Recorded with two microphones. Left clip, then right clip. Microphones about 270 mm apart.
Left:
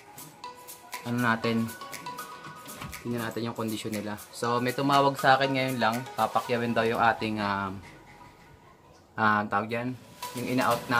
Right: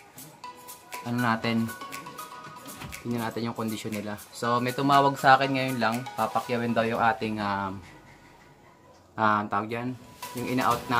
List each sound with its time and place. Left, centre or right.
0.4 s music: centre
2.7 s speech: centre
9.1 s speech: centre